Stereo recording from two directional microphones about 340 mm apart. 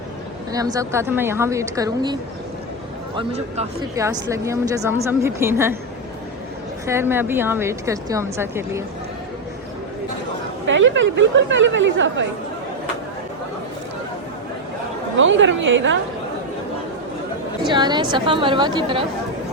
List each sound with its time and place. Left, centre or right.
0.5 s a woman's voice: centre
3.2 s a woman's voice: centre
6.8 s a woman's voice: centre
10.7 s speech: right
15.2 s speech: right
17.7 s a woman's voice: centre